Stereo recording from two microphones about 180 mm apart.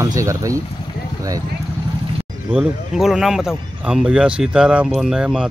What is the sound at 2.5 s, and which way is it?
Speech, 5° right (ahead or behind).